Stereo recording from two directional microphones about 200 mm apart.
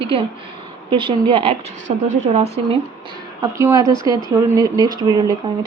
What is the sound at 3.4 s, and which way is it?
Speech, 15° right (ahead or behind).